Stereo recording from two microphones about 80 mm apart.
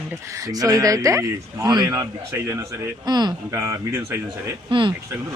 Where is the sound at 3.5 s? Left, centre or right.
Right.